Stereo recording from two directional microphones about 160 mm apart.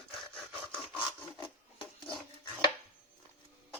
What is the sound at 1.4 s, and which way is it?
Filing, 30° left (ahead or behind).